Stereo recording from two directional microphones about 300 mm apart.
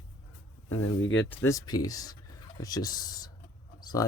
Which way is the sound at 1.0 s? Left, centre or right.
Left.